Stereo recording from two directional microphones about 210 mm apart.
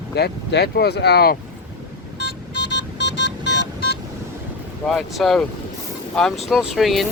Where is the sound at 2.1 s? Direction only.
55° left (ahead or behind).